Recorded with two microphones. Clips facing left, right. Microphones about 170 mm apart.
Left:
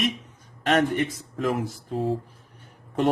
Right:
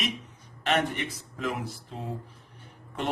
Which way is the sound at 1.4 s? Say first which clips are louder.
Left 6 dB; 45° left (ahead or behind).